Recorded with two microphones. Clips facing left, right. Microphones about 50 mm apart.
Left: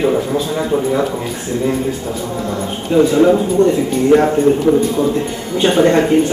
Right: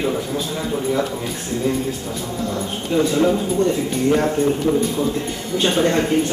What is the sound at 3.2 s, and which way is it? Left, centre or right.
Speech, centre.